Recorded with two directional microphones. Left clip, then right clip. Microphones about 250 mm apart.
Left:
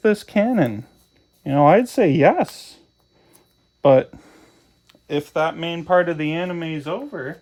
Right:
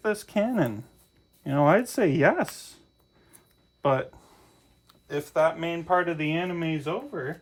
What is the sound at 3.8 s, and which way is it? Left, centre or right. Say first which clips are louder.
Speech: left 11 dB; left.